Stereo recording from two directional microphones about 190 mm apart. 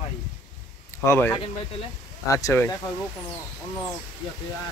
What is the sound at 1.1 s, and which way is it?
Speech, 10° left (ahead or behind).